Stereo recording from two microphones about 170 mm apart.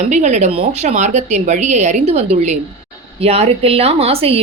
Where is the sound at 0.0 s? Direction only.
45° right (ahead or behind).